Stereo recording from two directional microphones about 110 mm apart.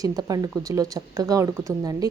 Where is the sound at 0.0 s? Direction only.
35° right (ahead or behind).